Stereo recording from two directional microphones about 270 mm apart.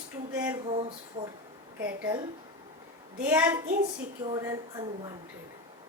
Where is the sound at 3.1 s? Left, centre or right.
Centre.